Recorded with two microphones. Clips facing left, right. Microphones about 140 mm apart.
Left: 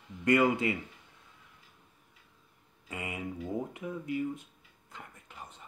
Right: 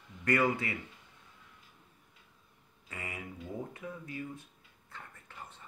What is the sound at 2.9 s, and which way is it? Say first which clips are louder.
Speech: left 5 dB; 20° left (ahead or behind).